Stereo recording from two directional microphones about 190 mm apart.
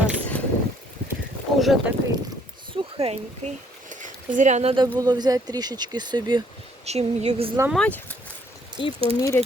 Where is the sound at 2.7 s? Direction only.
30° right (ahead or behind).